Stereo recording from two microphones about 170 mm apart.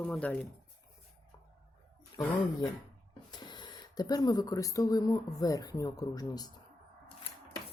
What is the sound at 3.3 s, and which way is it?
Speech, 25° left (ahead or behind).